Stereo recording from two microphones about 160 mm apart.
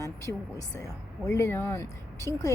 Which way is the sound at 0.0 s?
20° left (ahead or behind).